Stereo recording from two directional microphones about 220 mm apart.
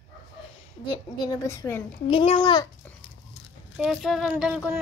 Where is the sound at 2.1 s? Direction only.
25° left (ahead or behind).